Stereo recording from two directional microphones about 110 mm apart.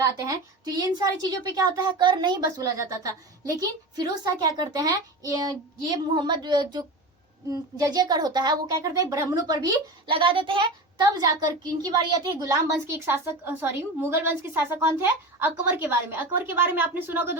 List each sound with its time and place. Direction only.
0.0 s a woman's voice: 35° right (ahead or behind)
10.1 s a woman's voice: 50° right (ahead or behind); by 12.5 s 35° right (ahead or behind)
13.1 s a woman's voice: 20° right (ahead or behind)